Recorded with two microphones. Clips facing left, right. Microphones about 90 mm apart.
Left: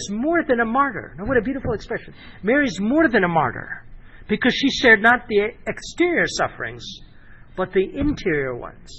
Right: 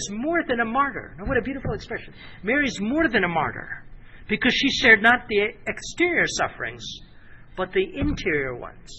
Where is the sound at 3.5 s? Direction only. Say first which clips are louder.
Left 4 dB; 35° left (ahead or behind).